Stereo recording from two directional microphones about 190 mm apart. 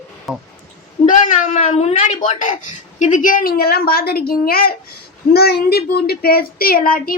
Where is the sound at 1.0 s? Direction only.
40° left (ahead or behind).